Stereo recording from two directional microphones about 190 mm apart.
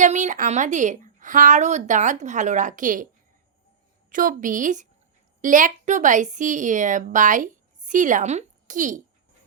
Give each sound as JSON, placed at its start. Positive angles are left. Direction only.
{"t": 0.0, "sound": "a woman's voice", "side_deg": -40}
{"t": 4.1, "sound": "a woman's voice", "side_deg": -45}